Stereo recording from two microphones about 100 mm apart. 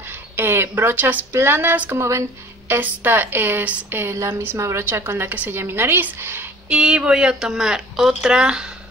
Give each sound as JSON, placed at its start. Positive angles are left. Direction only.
{"t": 0.0, "sound": "speech", "side_deg": -20}
{"t": 6.7, "sound": "speech", "side_deg": -10}